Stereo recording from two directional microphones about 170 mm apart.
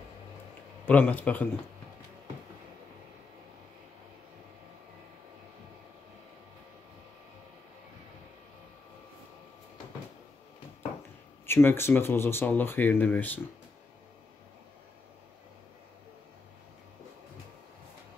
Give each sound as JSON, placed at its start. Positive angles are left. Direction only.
{"t": 0.8, "sound": "speech", "side_deg": 10}
{"t": 11.4, "sound": "speech", "side_deg": 15}